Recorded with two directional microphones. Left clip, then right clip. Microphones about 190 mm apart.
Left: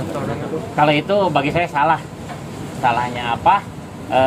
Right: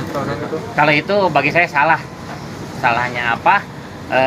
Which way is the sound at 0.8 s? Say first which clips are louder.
Right 1 dB; 25° left (ahead or behind).